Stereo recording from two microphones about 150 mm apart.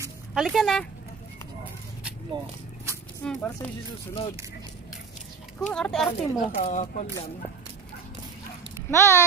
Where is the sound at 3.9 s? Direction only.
35° left (ahead or behind).